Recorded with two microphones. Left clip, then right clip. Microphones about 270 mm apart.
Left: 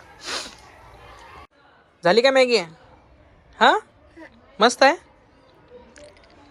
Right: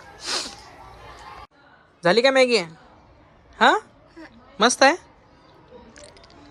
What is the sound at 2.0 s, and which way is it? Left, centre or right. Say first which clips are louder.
A man's voice: left 1 dB; centre.